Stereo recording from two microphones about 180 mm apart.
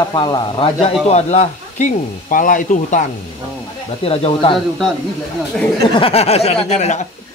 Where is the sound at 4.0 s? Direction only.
35° left (ahead or behind).